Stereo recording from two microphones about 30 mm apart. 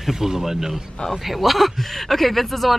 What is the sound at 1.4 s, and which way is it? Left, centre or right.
Speech, centre.